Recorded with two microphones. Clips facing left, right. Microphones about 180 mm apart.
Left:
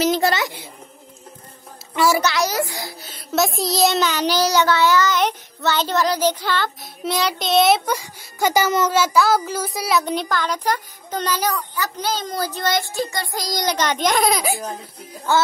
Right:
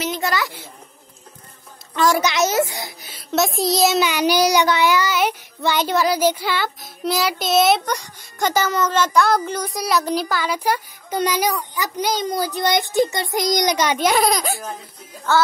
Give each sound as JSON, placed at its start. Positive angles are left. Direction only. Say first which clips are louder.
{"t": 0.0, "sound": "a sound", "louder": "left 6 dB", "side_deg": 35}
{"t": 0.3, "sound": "a child's voice", "louder": "left 1 dB", "side_deg": 20}
{"t": 2.0, "sound": "a child's voice", "louder": "even", "side_deg": 10}
{"t": 2.2, "sound": "a child's voice", "louder": "right 2 dB", "side_deg": -20}
{"t": 3.1, "sound": "a child's voice", "louder": "even", "side_deg": 0}
{"t": 15.3, "sound": "a child's voice", "louder": "right 1 dB", "side_deg": 15}